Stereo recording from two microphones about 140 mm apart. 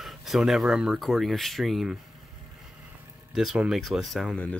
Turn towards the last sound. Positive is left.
turn(degrees=5)  # may be behind; listen again after turning